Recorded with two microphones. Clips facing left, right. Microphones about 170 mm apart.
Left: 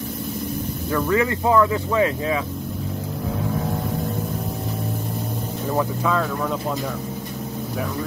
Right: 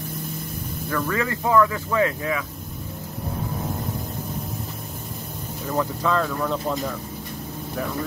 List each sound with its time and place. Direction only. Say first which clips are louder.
0.9 s speech: left 5 dB; 15° left (ahead or behind)
5.8 s speech: even; 5° left (ahead or behind)